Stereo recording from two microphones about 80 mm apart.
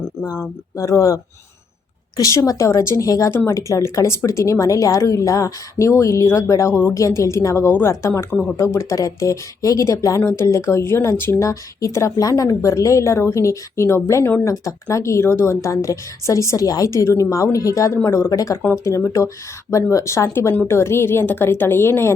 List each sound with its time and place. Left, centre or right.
0.8 s speech: left
18.3 s speech: left